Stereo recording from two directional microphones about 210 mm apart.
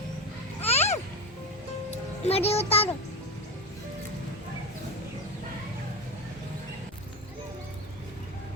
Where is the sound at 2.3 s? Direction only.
30° left (ahead or behind).